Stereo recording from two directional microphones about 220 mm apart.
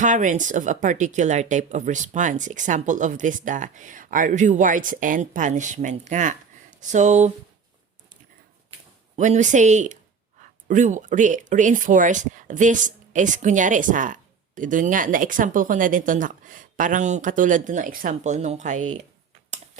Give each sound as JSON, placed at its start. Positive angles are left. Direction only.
{"t": 0.0, "sound": "speech", "side_deg": -35}
{"t": 9.1, "sound": "speech", "side_deg": -35}